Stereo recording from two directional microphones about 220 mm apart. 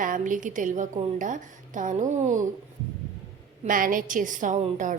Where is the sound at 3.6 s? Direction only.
40° right (ahead or behind).